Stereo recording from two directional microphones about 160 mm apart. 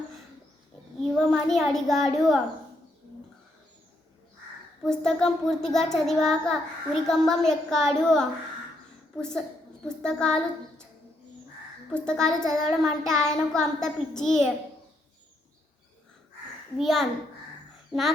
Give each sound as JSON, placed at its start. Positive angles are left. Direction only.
{"t": 1.3, "sound": "child singing", "side_deg": 0}
{"t": 4.8, "sound": "child singing", "side_deg": 5}
{"t": 9.9, "sound": "a child's voice", "side_deg": 5}
{"t": 11.9, "sound": "child singing", "side_deg": 5}
{"t": 16.7, "sound": "child singing", "side_deg": 0}